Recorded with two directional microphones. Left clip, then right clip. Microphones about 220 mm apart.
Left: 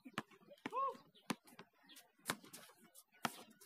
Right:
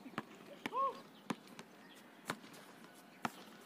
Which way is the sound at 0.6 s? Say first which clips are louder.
Right 3 dB; 40° right (ahead or behind).